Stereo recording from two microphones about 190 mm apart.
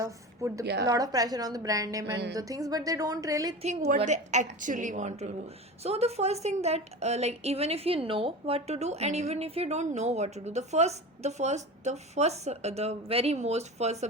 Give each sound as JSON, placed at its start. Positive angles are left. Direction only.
{"t": 0.0, "sound": "a sound", "side_deg": -15}
{"t": 0.6, "sound": "a woman's voice", "side_deg": -60}
{"t": 0.9, "sound": "a woman's voice", "side_deg": -20}
{"t": 3.6, "sound": "a woman's voice", "side_deg": -35}